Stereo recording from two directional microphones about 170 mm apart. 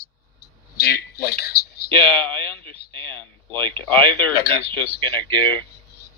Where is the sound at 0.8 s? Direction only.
65° left (ahead or behind).